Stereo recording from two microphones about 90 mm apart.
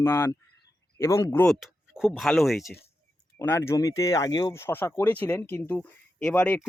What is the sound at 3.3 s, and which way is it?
Speech, 25° left (ahead or behind).